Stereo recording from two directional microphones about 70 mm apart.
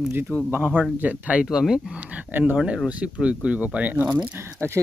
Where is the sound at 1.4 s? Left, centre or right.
Centre.